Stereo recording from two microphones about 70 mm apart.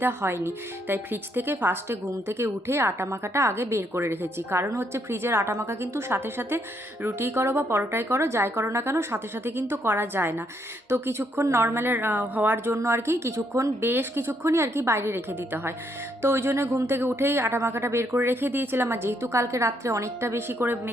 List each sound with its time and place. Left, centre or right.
0.0 s speech: right